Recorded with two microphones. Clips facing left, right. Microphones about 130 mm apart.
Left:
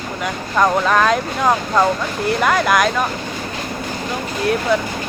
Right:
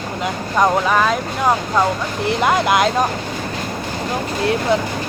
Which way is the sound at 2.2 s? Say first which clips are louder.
Even; 20° right (ahead or behind).